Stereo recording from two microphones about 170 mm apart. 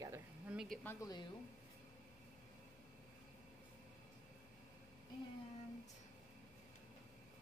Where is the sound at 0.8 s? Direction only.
20° left (ahead or behind).